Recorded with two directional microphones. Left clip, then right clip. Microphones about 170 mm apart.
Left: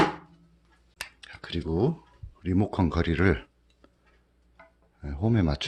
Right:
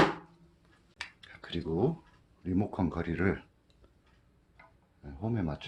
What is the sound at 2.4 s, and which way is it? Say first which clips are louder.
Speech: left 5 dB; 50° left (ahead or behind).